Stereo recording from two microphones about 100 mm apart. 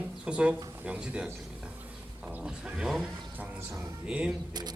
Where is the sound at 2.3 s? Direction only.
10° right (ahead or behind).